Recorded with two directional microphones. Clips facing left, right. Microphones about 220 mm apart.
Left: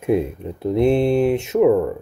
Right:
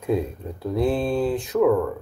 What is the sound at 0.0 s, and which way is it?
Speech, 20° left (ahead or behind).